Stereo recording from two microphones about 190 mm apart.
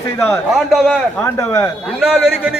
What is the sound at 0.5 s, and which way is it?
Speech, centre (ahead or behind).